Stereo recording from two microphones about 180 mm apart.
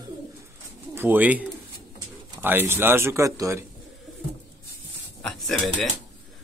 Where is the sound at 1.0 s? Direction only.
10° right (ahead or behind).